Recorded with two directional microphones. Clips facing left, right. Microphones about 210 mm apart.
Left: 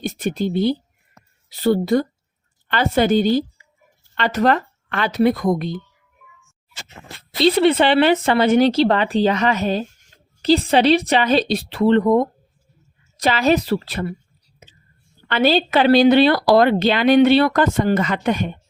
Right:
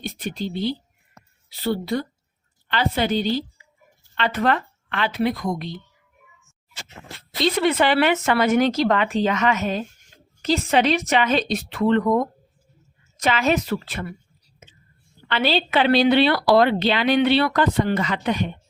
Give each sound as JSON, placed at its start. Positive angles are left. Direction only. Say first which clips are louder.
{"t": 0.2, "sound": "speech", "louder": "left 7 dB", "side_deg": 50}
{"t": 7.3, "sound": "speech", "louder": "left 5 dB", "side_deg": 30}
{"t": 14.6, "sound": "whispering", "louder": "left 1 dB", "side_deg": 35}
{"t": 15.3, "sound": "speech", "louder": "left 5 dB", "side_deg": 45}